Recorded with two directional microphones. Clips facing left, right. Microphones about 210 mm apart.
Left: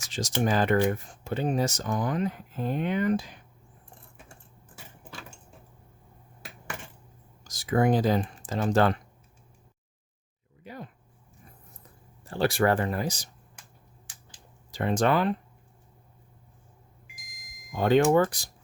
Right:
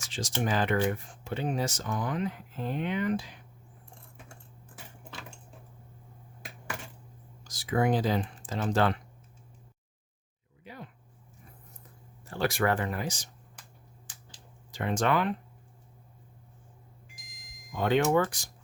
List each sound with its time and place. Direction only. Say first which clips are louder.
0.1 s speech: left 4 dB; 40° left (ahead or behind)
7.4 s speech: left 3 dB; 45° left (ahead or behind)
10.6 s a sound: left 4 dB; 45° left (ahead or behind)
12.2 s speech: left 4 dB; 30° left (ahead or behind)
14.7 s speech: left 3 dB; 35° left (ahead or behind)
17.1 s a sound: even; 10° left (ahead or behind)
17.7 s speech: left 4 dB; 40° left (ahead or behind)